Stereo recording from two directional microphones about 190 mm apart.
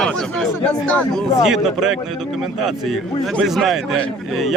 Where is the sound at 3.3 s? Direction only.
Centre (ahead or behind).